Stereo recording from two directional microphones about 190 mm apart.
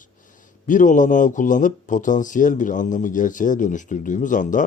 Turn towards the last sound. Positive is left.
turn(degrees=45)  # may be behind; listen again after turning